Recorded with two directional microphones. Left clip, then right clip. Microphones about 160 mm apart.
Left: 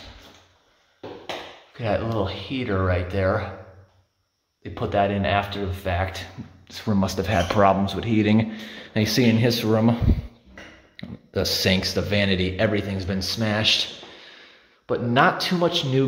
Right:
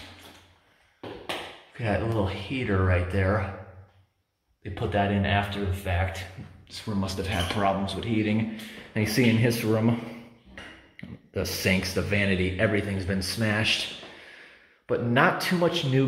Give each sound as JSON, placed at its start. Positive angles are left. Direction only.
{"t": 1.8, "sound": "speech", "side_deg": 15}
{"t": 4.7, "sound": "speech", "side_deg": 25}
{"t": 6.7, "sound": "speech", "side_deg": 45}
{"t": 8.9, "sound": "speech", "side_deg": 20}
{"t": 11.0, "sound": "speech", "side_deg": 25}